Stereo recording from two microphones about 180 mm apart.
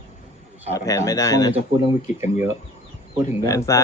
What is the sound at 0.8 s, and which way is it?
Speech, 20° left (ahead or behind).